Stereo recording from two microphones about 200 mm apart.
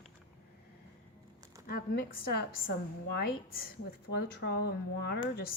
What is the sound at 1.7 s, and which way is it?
A woman's voice, 50° left (ahead or behind).